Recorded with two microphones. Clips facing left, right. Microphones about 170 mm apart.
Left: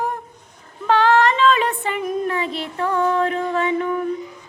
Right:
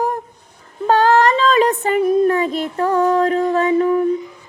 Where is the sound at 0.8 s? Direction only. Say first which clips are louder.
Right 3 dB; 40° right (ahead or behind).